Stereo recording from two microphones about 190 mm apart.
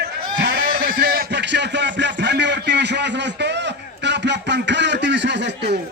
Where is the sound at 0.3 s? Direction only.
65° right (ahead or behind).